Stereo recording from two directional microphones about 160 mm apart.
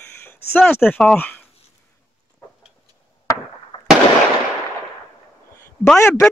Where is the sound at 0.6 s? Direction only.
10° left (ahead or behind).